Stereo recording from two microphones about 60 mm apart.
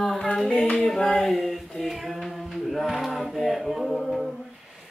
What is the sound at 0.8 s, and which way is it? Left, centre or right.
Child singing, centre.